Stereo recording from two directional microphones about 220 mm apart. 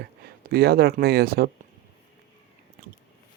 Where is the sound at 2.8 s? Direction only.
35° right (ahead or behind).